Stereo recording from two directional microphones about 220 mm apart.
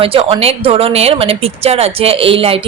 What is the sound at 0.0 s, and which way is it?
Speech, 25° right (ahead or behind).